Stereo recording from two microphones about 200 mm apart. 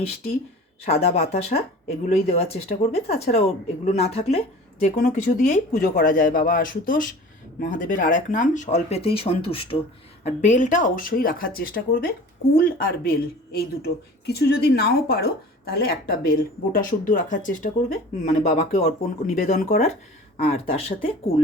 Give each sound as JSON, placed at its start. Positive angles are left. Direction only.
{"t": 0.9, "sound": "speech", "side_deg": 30}
{"t": 4.9, "sound": "speech", "side_deg": 40}